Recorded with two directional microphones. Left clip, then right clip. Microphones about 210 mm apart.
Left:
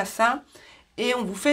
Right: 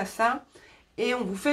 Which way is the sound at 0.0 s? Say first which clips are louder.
Left 3 dB; 35° left (ahead or behind).